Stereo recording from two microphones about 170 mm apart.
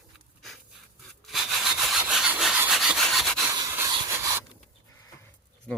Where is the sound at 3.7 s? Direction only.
15° right (ahead or behind).